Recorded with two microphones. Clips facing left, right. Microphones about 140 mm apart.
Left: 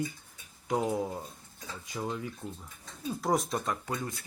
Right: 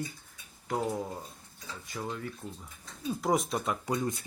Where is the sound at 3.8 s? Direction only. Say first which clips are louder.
Right 5 dB; 20° right (ahead or behind).